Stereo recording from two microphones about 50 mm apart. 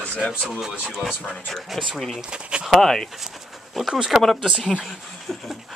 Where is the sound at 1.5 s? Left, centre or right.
Centre.